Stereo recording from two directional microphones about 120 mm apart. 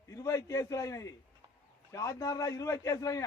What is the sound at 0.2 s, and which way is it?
A man's voice, 30° left (ahead or behind).